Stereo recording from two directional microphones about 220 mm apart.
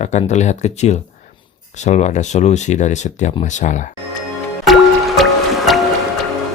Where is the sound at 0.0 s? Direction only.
30° left (ahead or behind).